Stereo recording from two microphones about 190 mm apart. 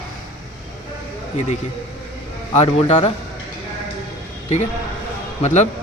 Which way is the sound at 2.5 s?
35° left (ahead or behind).